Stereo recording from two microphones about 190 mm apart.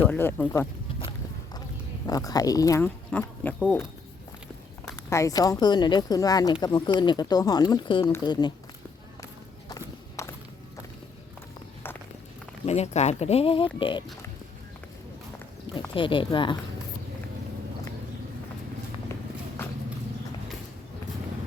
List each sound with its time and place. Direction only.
0.1 s speech: 10° left (ahead or behind)
2.0 s speech: 20° left (ahead or behind); by 3.8 s centre (ahead or behind)
5.0 s speech: 15° left (ahead or behind)
9.6 s walk: 15° left (ahead or behind)
12.6 s speech: 35° left (ahead or behind)
16.0 s speech: 25° left (ahead or behind)